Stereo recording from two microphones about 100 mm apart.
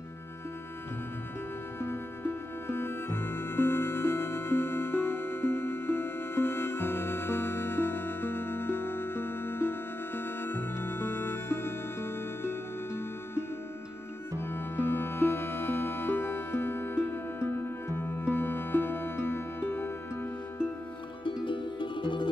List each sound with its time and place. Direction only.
1.8 s music: 25° left (ahead or behind)
21.5 s music: 55° left (ahead or behind)